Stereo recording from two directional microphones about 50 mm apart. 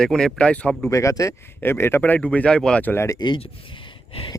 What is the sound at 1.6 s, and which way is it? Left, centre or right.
Speech, left.